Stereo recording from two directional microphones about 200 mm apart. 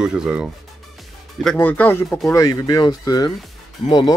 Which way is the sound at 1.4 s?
5° left (ahead or behind).